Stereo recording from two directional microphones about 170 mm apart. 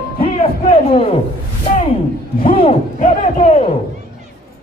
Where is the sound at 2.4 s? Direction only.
40° left (ahead or behind).